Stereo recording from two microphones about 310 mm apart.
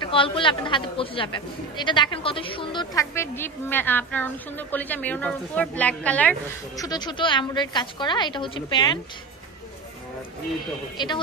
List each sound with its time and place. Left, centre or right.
0.0 s speech: centre